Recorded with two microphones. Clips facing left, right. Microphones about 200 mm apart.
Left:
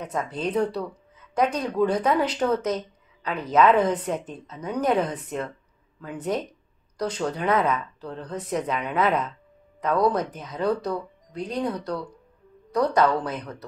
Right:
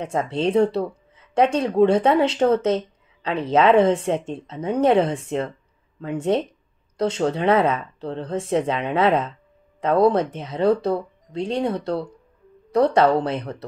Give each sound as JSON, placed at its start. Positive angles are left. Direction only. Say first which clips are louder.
{"t": 0.0, "sound": "speech", "louder": "right 6 dB", "side_deg": -25}